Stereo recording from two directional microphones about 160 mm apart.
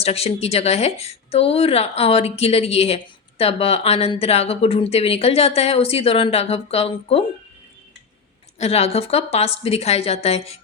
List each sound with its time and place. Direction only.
0.0 s speech: 40° left (ahead or behind)
8.5 s speech: 40° left (ahead or behind)